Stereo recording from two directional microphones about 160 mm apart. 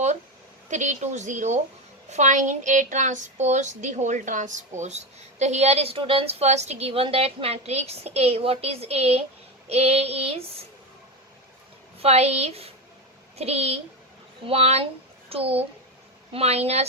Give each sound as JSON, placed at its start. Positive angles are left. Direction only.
{"t": 0.7, "sound": "a woman's voice", "side_deg": -50}
{"t": 11.9, "sound": "a woman's voice", "side_deg": -40}